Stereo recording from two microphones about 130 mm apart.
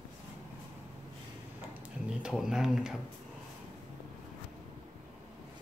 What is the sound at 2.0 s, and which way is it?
Speech, 5° right (ahead or behind).